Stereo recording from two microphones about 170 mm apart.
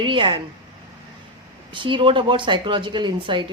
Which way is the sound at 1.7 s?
30° right (ahead or behind).